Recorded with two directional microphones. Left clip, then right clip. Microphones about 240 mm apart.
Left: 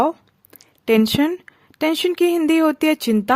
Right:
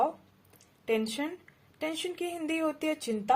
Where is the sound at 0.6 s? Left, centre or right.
Left.